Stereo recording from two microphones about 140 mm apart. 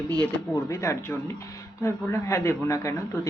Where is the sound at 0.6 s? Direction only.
20° left (ahead or behind).